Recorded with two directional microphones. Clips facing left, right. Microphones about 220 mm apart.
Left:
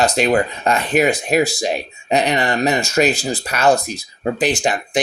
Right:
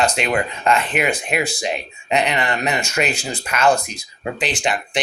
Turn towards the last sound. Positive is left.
turn(degrees=45)  # may be behind; listen again after turning